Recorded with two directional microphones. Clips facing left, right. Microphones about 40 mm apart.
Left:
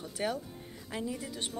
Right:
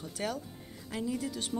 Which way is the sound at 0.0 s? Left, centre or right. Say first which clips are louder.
Left 2 dB; centre.